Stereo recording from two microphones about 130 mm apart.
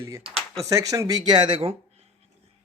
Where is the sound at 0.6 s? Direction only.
25° right (ahead or behind); by 1.7 s 40° right (ahead or behind).